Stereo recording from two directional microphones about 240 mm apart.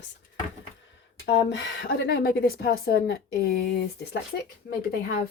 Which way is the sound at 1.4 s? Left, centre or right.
Left.